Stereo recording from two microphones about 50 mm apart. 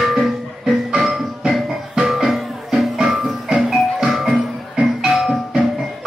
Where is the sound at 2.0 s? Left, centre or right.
Centre.